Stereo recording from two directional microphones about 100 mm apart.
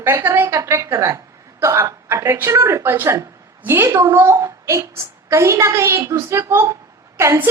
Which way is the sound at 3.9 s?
30° right (ahead or behind).